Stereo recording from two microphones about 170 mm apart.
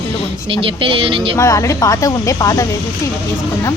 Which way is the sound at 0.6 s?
30° right (ahead or behind).